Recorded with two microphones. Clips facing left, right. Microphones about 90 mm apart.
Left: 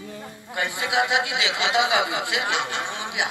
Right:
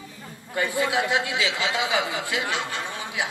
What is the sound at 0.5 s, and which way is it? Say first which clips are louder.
A woman's voice: right 1 dB; 20° left (ahead or behind).